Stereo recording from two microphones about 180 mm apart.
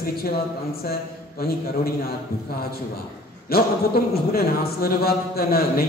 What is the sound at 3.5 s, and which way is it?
Speech, 60° left (ahead or behind).